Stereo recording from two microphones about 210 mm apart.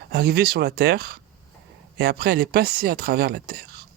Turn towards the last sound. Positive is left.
turn(degrees=-45)  # may be behind; listen again after turning